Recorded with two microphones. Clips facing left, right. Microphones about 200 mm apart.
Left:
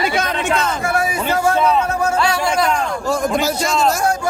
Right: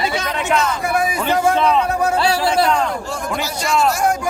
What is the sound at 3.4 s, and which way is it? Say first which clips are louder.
Speech: left 1 dB; 45° left (ahead or behind).